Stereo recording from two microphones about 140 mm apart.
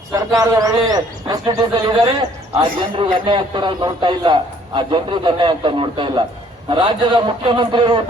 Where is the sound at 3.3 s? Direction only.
35° right (ahead or behind).